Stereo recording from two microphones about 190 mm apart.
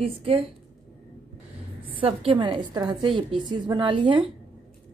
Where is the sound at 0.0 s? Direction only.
30° right (ahead or behind).